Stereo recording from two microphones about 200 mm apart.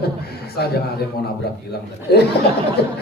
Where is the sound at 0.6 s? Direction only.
50° left (ahead or behind).